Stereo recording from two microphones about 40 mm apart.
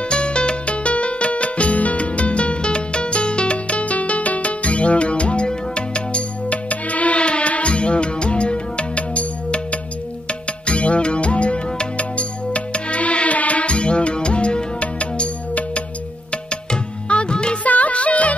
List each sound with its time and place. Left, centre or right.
0.1 s music: left
17.6 s music: left